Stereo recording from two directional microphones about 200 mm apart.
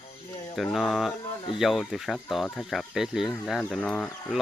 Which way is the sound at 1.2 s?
25° left (ahead or behind).